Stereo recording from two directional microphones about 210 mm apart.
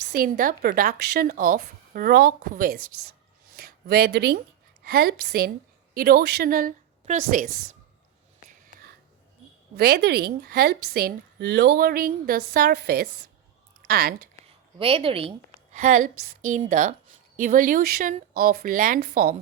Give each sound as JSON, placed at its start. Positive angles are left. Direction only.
{"t": 0.1, "sound": "a woman's voice", "side_deg": -40}
{"t": 3.5, "sound": "a sound", "side_deg": -50}
{"t": 4.8, "sound": "a woman's voice", "side_deg": -45}
{"t": 9.7, "sound": "a woman's voice", "side_deg": -50}
{"t": 14.8, "sound": "a woman's voice", "side_deg": -25}